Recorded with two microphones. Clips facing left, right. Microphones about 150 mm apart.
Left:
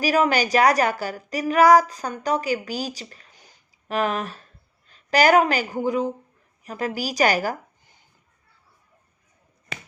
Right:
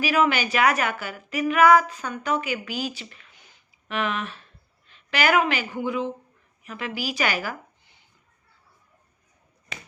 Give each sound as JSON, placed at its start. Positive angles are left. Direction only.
{"t": 0.0, "sound": "a woman's voice", "side_deg": 40}